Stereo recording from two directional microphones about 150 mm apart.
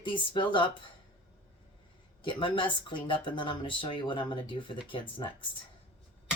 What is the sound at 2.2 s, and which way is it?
Speech, 35° left (ahead or behind).